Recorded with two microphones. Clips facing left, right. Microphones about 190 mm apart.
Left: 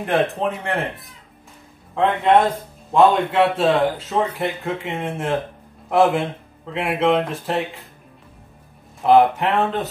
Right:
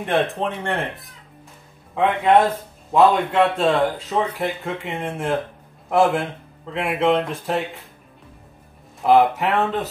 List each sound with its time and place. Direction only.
0.0 s a man's voice: centre (ahead or behind)
9.0 s a man's voice: centre (ahead or behind)